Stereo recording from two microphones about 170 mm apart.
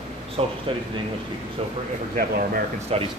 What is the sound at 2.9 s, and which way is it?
Speech, 35° right (ahead or behind).